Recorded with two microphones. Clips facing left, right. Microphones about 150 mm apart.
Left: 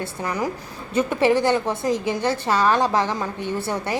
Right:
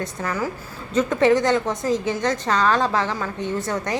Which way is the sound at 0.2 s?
15° left (ahead or behind).